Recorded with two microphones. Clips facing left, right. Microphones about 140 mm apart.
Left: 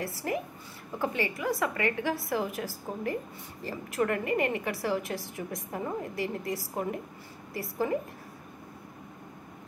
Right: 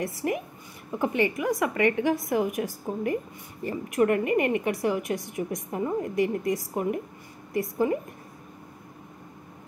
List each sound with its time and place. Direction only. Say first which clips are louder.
0.0 s a woman's voice: right 4 dB; 20° right (ahead or behind)